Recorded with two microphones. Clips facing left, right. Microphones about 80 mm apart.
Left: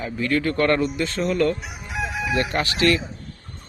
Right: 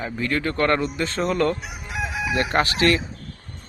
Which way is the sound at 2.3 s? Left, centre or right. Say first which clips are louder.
Right 3 dB; right.